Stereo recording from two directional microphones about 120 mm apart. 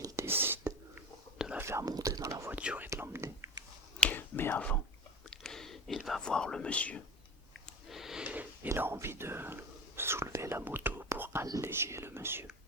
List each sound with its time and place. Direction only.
0.0 s whispering: 20° right (ahead or behind)
1.4 s whispering: 5° right (ahead or behind)
1.6 s whispering: 25° right (ahead or behind)
2.5 s whispering: 10° right (ahead or behind)
4.0 s whispering: 15° left (ahead or behind)
7.9 s whispering: 5° right (ahead or behind); by 11.4 s 20° right (ahead or behind)
11.6 s speech: 20° right (ahead or behind)